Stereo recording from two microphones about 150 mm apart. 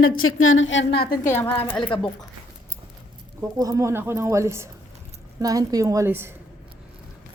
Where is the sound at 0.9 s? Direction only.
90° left.